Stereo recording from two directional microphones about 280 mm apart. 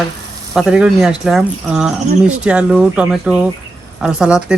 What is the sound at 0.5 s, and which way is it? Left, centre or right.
Speech, centre.